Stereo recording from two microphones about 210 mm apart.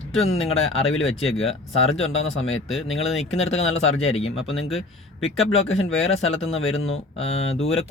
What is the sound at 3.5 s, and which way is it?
Speech, 70° left (ahead or behind).